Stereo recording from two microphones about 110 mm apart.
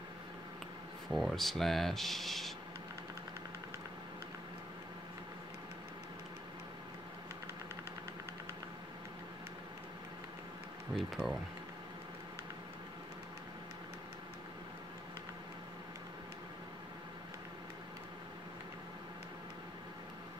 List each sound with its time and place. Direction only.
1.1 s speech: centre (ahead or behind)
11.0 s speech: centre (ahead or behind)